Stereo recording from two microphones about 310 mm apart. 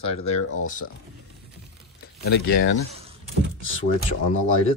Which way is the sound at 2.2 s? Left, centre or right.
Left.